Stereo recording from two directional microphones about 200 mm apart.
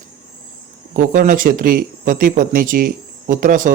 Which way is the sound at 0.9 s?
40° right (ahead or behind).